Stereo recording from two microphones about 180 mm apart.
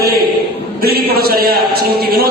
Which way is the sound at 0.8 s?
60° right (ahead or behind).